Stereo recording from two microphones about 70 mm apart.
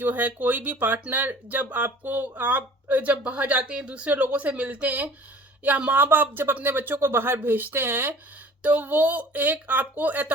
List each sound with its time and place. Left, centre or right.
0.0 s speech: right